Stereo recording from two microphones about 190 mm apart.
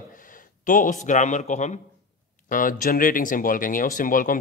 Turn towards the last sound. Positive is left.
turn(degrees=45)  # may be behind; listen again after turning